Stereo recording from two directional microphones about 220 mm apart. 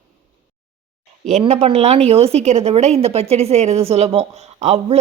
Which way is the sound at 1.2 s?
30° right (ahead or behind).